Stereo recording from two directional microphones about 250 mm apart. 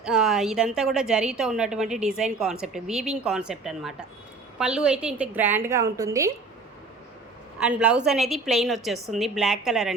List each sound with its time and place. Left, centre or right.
0.0 s a woman's voice: centre
7.6 s a woman's voice: centre